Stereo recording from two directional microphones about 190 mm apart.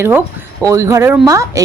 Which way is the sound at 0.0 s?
10° right (ahead or behind).